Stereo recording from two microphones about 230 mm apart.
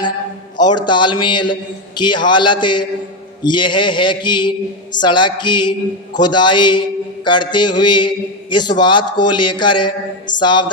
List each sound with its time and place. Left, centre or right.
0.5 s a man's voice: centre